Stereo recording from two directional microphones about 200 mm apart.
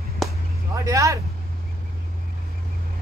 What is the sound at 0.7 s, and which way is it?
Vehicle, 15° right (ahead or behind).